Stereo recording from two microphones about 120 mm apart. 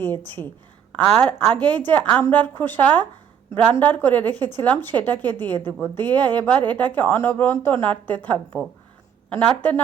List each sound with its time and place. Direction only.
0.2 s a woman's voice: 15° left (ahead or behind)
9.4 s a woman's voice: 10° left (ahead or behind)